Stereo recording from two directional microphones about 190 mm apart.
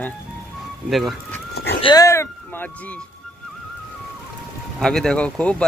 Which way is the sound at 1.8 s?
20° left (ahead or behind).